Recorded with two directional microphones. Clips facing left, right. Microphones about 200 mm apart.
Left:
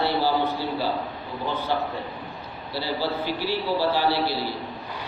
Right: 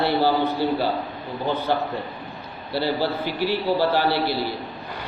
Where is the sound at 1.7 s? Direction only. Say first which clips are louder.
Right 2 dB; 55° right (ahead or behind).